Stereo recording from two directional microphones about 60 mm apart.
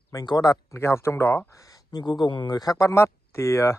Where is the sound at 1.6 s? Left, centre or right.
Left.